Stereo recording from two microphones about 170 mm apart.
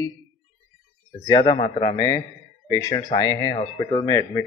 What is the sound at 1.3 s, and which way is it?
Speech, 30° left (ahead or behind).